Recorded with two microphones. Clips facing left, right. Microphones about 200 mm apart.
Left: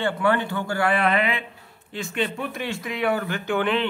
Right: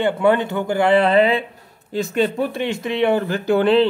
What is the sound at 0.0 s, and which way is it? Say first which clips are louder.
Speech: right 6 dB; 20° right (ahead or behind).